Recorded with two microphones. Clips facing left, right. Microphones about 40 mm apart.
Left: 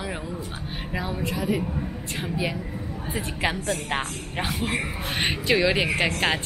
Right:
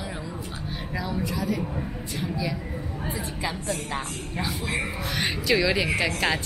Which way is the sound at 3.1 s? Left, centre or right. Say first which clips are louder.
Left 7 dB; left.